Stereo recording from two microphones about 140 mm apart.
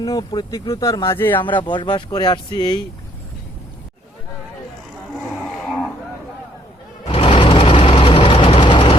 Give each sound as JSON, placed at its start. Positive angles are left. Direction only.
{"t": 0.0, "sound": "speech", "side_deg": 25}
{"t": 1.5, "sound": "speech", "side_deg": 35}
{"t": 7.0, "sound": "a sound", "side_deg": 40}
{"t": 7.3, "sound": "vehicle", "side_deg": 40}